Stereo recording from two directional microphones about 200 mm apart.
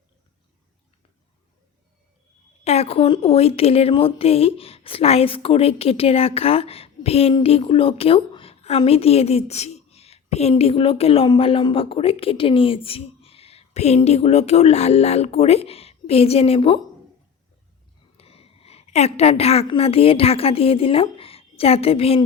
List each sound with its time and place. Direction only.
2.6 s a woman's voice: 30° left (ahead or behind)
18.2 s a woman's voice: 30° left (ahead or behind)